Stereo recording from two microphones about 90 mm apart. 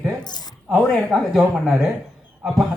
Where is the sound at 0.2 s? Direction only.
50° left (ahead or behind).